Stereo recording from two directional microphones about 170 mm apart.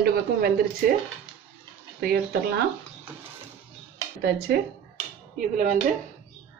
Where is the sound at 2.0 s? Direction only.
65° right (ahead or behind).